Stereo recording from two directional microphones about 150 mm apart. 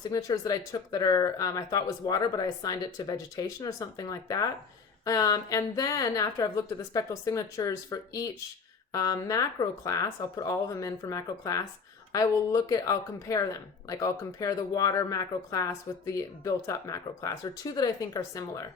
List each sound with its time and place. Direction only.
0.1 s speech: 25° left (ahead or behind)